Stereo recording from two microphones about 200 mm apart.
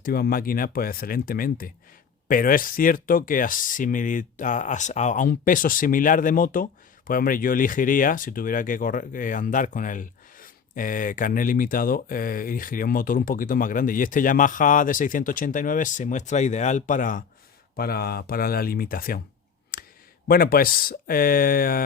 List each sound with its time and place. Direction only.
0.0 s speech: 50° left (ahead or behind)
19.7 s clicking: 50° left (ahead or behind)
20.2 s speech: 50° left (ahead or behind)